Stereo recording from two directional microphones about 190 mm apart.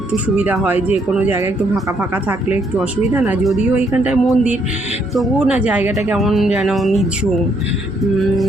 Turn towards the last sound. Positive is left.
turn(degrees=0)  # may be behind; listen again after turning